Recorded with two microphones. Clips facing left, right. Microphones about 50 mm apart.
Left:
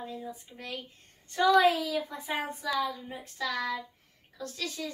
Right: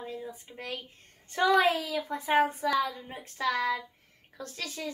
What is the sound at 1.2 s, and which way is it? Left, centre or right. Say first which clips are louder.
Speech: left 1 dB; right.